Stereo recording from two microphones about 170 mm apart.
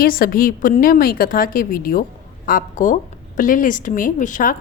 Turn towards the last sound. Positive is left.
turn(degrees=50)  # may be behind; listen again after turning